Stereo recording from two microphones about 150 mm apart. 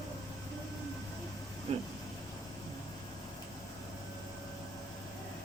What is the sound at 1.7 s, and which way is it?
Speech, 40° right (ahead or behind).